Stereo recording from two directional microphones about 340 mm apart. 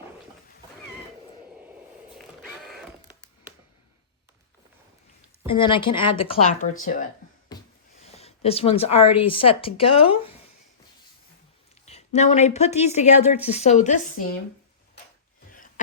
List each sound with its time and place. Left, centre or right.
2.1 s a sound: centre
5.5 s speech: centre
8.1 s speech: centre
11.9 s a woman's voice: centre